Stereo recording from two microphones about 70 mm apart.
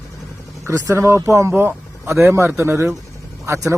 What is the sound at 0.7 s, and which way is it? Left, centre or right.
Speech, right.